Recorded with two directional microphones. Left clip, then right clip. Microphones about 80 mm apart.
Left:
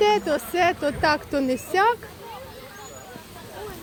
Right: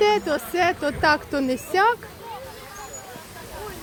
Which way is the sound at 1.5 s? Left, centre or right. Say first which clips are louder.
Right 1 dB; centre.